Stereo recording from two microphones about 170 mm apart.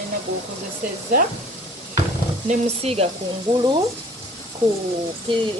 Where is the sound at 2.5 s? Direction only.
35° right (ahead or behind).